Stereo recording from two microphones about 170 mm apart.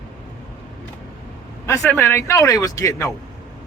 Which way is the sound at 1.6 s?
15° left (ahead or behind).